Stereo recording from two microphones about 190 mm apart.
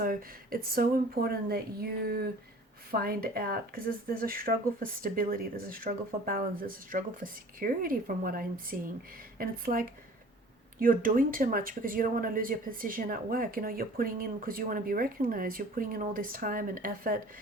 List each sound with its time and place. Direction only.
0.0 s speech: 50° right (ahead or behind)